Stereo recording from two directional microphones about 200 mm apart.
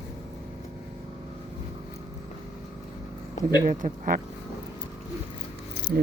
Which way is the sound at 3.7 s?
40° right (ahead or behind).